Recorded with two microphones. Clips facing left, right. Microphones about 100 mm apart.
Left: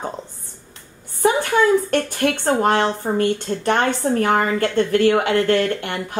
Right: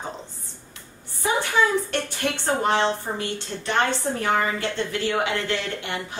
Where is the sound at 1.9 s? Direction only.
50° left (ahead or behind).